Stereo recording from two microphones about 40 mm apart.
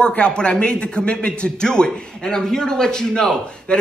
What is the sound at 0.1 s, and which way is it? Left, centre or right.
A man's voice, left.